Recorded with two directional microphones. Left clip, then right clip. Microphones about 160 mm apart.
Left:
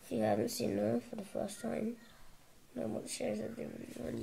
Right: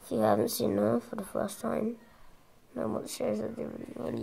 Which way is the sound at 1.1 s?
40° right (ahead or behind).